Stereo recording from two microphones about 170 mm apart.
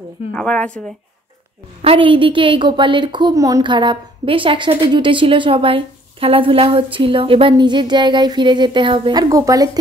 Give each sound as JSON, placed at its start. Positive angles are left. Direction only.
{"t": 0.3, "sound": "a woman's voice", "side_deg": 5}
{"t": 1.8, "sound": "a woman's voice", "side_deg": -35}